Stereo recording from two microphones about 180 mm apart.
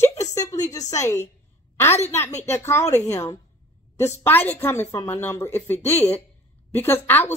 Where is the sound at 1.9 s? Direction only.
40° left (ahead or behind).